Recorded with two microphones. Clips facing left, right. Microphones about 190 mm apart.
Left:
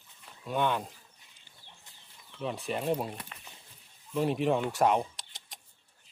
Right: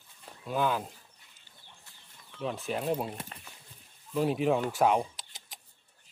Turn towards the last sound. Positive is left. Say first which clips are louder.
# even
turn(degrees=0)  # may be behind; listen again after turning